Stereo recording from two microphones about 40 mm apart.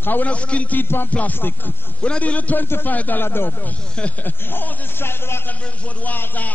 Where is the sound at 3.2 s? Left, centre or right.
Left.